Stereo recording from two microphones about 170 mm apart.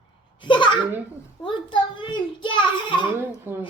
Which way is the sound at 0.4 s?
30° left (ahead or behind).